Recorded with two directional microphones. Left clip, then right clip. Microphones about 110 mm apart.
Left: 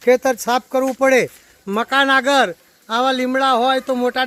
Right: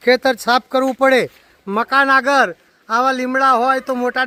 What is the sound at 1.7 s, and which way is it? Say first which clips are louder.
A man's voice: right 2 dB; 10° left (ahead or behind).